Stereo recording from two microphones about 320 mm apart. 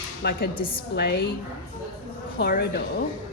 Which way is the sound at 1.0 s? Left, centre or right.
Left.